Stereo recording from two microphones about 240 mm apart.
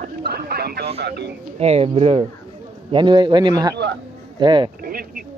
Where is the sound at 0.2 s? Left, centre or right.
Right.